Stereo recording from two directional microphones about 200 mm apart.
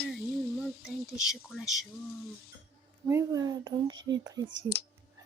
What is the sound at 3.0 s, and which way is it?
Speech, 15° right (ahead or behind).